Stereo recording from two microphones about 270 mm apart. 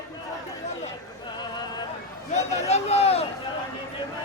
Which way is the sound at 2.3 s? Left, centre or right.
Left.